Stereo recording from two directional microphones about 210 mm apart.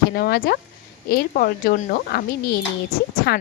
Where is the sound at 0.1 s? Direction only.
45° left (ahead or behind).